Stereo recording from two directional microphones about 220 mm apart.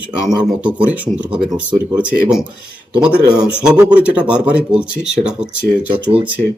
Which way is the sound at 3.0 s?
5° right (ahead or behind).